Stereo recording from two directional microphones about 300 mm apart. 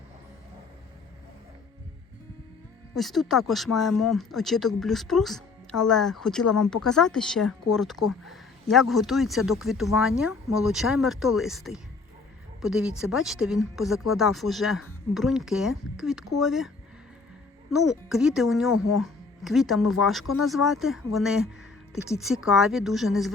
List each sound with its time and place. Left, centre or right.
2.9 s speech: centre
6.4 s speech: left
6.8 s speech: centre